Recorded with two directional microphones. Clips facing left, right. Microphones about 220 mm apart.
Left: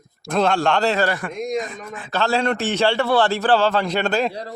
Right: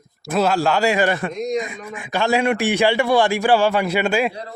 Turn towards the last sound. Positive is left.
turn(degrees=-10)  # may be behind; listen again after turning